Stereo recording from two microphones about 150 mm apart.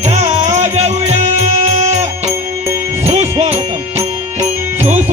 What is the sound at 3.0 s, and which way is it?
Music, 45° right (ahead or behind).